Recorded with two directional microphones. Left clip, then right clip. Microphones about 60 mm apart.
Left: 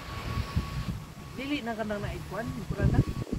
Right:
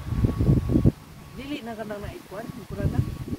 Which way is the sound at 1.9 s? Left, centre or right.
Centre.